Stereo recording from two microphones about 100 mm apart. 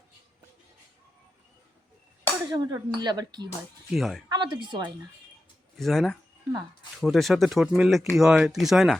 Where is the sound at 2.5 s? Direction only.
45° right (ahead or behind).